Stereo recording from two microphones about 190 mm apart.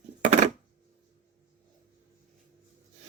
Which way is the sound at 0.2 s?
40° right (ahead or behind).